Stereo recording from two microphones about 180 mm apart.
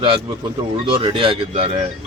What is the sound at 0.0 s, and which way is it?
A man's voice, 25° right (ahead or behind).